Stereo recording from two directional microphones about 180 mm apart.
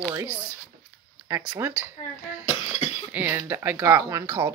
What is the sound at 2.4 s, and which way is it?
Cough, 35° left (ahead or behind).